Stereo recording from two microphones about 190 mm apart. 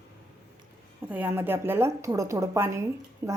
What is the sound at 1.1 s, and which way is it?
A woman's voice, 10° right (ahead or behind).